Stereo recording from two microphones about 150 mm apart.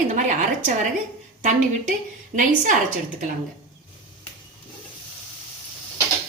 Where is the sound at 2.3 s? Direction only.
60° right (ahead or behind).